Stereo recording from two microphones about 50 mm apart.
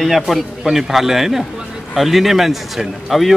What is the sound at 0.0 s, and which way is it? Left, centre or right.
Speech, centre.